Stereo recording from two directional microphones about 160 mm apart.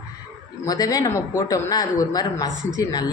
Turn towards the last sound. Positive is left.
turn(degrees=25)  # may be behind; listen again after turning